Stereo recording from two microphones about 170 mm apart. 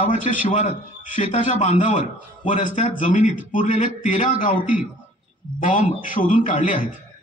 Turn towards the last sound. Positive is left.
turn(degrees=50)  # may be behind; listen again after turning